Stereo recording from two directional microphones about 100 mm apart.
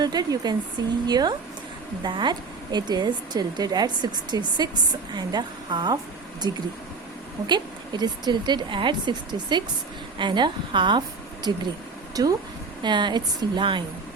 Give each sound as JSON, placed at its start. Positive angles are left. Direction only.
{"t": 0.0, "sound": "speech", "side_deg": -40}
{"t": 12.2, "sound": "speech", "side_deg": -35}
{"t": 12.8, "sound": "speech", "side_deg": -50}